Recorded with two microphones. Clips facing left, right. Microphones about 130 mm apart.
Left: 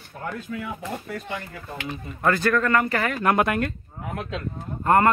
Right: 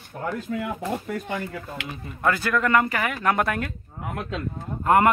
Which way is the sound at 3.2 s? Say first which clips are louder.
Left 2 dB; 10° left (ahead or behind).